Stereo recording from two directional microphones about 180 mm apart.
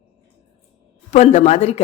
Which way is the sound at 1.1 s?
40° left (ahead or behind).